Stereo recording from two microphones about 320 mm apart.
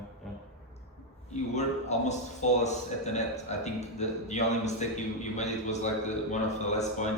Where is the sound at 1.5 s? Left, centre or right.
Left.